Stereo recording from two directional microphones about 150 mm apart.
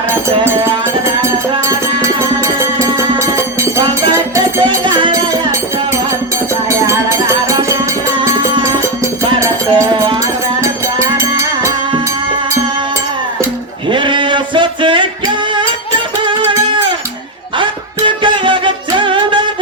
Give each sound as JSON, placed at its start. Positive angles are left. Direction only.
{"t": 2.6, "sound": "music", "side_deg": -20}
{"t": 4.6, "sound": "music", "side_deg": -30}
{"t": 6.7, "sound": "music", "side_deg": -20}
{"t": 13.9, "sound": "a sound", "side_deg": -35}
{"t": 16.2, "sound": "music", "side_deg": -35}